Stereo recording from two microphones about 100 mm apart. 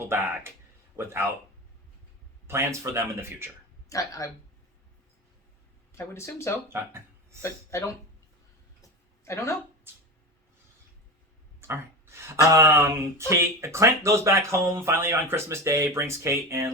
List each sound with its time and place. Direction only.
0.0 s speech: 25° right (ahead or behind)
2.5 s speech: 25° right (ahead or behind)
3.8 s speech: 35° left (ahead or behind)
5.9 s speech: 25° left (ahead or behind)
6.7 s speech: 25° right (ahead or behind)
7.4 s speech: 30° left (ahead or behind)
8.8 s a sound: 30° left (ahead or behind)
9.9 s a sound: 25° right (ahead or behind)
11.7 s speech: 25° right (ahead or behind)